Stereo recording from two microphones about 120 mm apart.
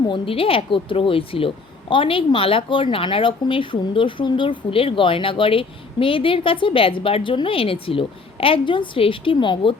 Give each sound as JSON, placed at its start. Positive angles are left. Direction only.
{"t": 0.0, "sound": "speech", "side_deg": 45}